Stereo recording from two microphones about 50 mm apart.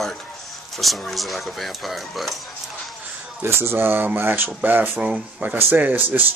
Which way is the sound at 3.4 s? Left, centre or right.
Right.